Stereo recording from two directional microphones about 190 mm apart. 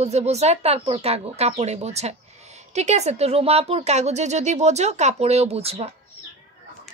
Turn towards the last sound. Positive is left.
turn(degrees=-30)  # may be behind; listen again after turning